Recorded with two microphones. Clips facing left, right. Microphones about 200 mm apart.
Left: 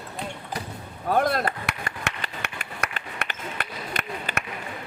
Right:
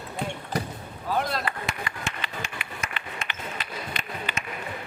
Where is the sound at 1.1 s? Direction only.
55° left (ahead or behind).